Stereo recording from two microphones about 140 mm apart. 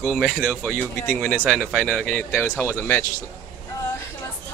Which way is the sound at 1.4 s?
Centre (ahead or behind).